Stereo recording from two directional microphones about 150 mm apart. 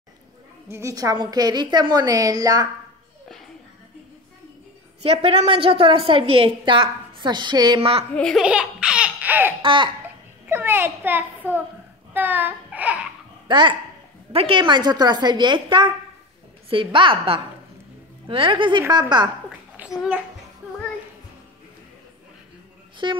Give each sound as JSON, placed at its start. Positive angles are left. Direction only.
{"t": 0.7, "sound": "a woman's voice", "side_deg": -20}
{"t": 5.0, "sound": "a woman's voice", "side_deg": -40}
{"t": 8.1, "sound": "speech", "side_deg": 5}
{"t": 8.4, "sound": "laughter", "side_deg": -5}
{"t": 9.6, "sound": "a woman's voice", "side_deg": -35}
{"t": 10.5, "sound": "a child's voice", "side_deg": -15}
{"t": 12.1, "sound": "a sound", "side_deg": -10}
{"t": 13.5, "sound": "a woman's voice", "side_deg": -30}
{"t": 19.8, "sound": "a child's voice", "side_deg": -5}
{"t": 23.0, "sound": "a woman's voice", "side_deg": -30}